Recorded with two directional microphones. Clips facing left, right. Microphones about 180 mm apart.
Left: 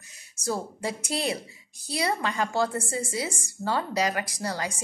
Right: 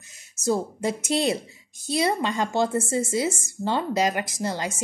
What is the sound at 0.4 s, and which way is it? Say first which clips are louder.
Speech: right 6 dB; 25° right (ahead or behind).